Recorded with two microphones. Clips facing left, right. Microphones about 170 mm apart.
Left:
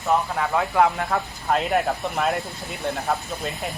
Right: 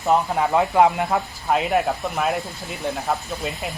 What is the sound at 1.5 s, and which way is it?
Speech, 5° right (ahead or behind).